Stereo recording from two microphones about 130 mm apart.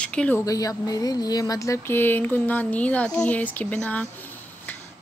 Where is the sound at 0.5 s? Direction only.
25° left (ahead or behind); by 4.1 s 10° left (ahead or behind).